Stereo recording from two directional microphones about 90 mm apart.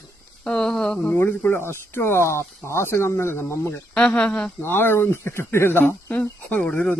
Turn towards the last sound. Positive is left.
turn(degrees=10)  # may be behind; listen again after turning